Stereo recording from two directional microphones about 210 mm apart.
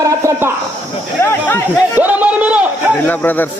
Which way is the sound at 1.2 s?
10° left (ahead or behind).